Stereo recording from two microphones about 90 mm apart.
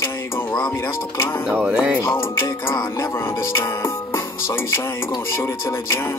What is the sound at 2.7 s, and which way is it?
Music, 45° left (ahead or behind).